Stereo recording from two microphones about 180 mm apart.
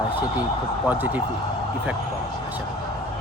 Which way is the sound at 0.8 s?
10° right (ahead or behind).